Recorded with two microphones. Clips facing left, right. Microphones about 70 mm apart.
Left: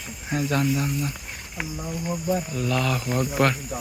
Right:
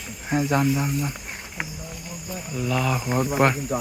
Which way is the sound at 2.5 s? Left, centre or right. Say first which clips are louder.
Even; centre.